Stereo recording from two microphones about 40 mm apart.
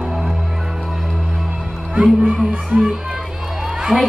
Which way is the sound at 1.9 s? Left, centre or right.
Right.